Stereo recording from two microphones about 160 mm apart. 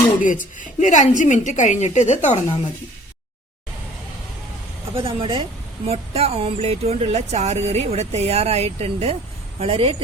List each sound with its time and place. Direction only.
0.2 s a woman's voice: 55° left (ahead or behind)
5.0 s speech: 35° right (ahead or behind)